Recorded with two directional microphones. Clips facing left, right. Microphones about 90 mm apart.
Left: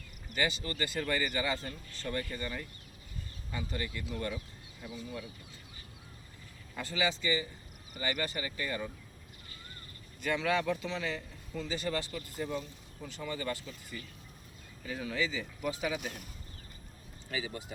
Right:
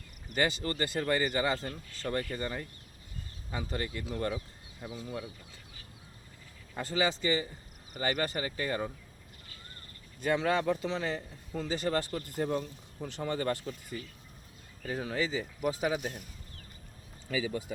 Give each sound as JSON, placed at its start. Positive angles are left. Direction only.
{"t": 0.3, "sound": "speech", "side_deg": -40}
{"t": 6.7, "sound": "speech", "side_deg": -35}
{"t": 10.2, "sound": "a man's voice", "side_deg": -30}
{"t": 14.8, "sound": "speech", "side_deg": -35}